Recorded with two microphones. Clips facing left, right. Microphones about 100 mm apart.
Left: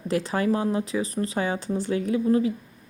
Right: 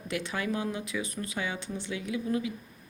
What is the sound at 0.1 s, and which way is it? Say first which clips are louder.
A woman's voice: left 8 dB; 40° left (ahead or behind).